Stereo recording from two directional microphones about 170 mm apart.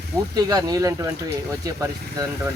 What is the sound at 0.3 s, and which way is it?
Speech, 20° right (ahead or behind).